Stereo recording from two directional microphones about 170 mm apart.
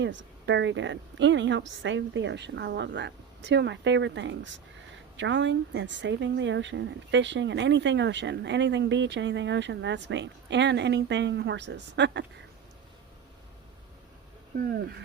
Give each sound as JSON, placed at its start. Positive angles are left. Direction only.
{"t": 0.0, "sound": "a woman's voice", "side_deg": -90}
{"t": 14.5, "sound": "speech", "side_deg": -60}